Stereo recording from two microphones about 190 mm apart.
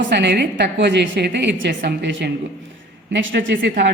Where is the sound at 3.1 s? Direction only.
70° right (ahead or behind).